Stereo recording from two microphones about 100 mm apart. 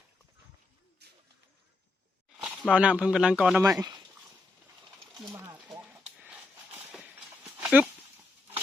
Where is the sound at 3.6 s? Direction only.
35° right (ahead or behind).